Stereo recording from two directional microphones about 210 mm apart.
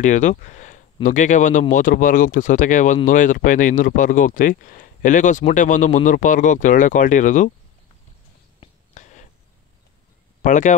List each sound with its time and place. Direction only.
0.0 s speech: 35° left (ahead or behind)
8.5 s a sound: 35° left (ahead or behind)
10.4 s speech: 35° left (ahead or behind)